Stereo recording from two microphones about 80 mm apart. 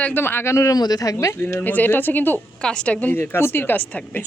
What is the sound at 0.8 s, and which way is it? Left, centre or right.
Speech, left.